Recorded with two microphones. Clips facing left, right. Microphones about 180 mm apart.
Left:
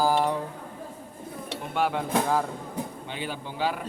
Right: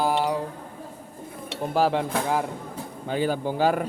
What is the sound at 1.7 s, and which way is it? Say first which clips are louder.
Dishes: right 5 dB; 30° right (ahead or behind).